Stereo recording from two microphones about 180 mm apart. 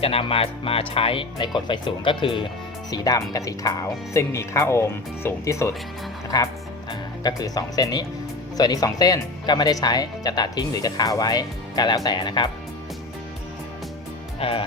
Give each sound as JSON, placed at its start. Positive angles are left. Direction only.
{"t": 0.0, "sound": "speech", "side_deg": 30}
{"t": 14.3, "sound": "speech", "side_deg": 30}